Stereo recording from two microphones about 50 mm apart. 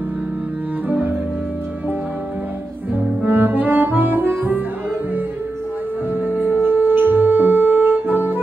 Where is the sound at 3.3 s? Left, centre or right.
Right.